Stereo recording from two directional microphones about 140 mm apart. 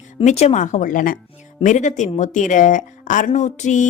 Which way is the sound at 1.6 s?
60° left (ahead or behind).